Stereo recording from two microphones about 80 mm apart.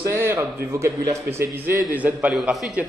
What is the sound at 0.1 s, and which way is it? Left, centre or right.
A man's voice, right.